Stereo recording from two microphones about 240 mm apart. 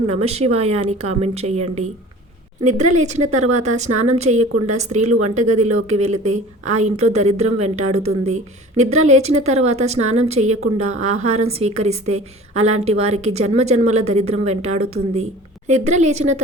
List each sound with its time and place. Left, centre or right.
0.1 s a woman's voice: right